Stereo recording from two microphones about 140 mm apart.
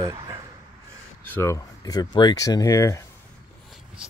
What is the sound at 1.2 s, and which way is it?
Speech, 15° left (ahead or behind).